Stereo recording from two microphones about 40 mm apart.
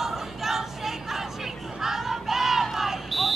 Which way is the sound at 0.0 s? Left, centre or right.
Centre.